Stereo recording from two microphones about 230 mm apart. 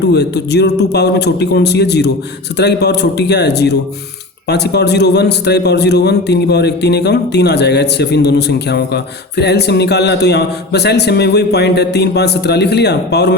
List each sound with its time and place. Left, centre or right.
0.1 s a man's voice: left